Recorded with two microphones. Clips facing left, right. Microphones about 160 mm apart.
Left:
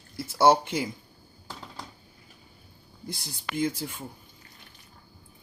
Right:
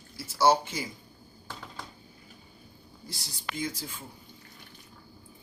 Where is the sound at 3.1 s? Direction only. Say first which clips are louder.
Left 5 dB; 55° left (ahead or behind).